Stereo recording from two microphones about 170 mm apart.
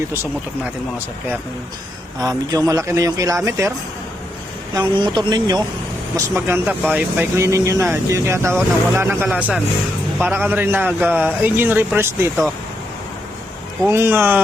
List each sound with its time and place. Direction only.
2.2 s a man's voice: 20° right (ahead or behind)
4.7 s a man's voice: 25° right (ahead or behind)
13.8 s a man's voice: 15° right (ahead or behind)